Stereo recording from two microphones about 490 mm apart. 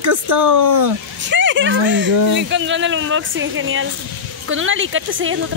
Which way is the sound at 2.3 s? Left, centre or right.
Right.